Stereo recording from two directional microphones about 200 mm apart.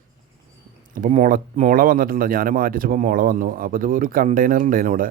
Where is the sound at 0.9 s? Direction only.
40° right (ahead or behind).